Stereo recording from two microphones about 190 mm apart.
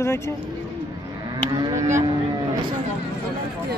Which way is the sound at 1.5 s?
15° right (ahead or behind).